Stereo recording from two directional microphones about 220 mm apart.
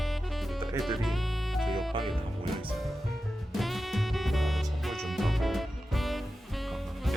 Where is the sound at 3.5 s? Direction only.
Centre (ahead or behind).